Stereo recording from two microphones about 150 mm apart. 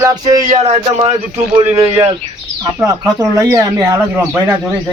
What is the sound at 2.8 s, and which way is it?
Speech, 20° right (ahead or behind).